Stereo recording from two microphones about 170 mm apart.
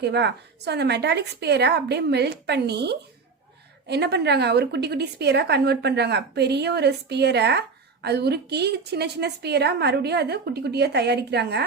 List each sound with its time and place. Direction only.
0.0 s a woman's voice: 90° right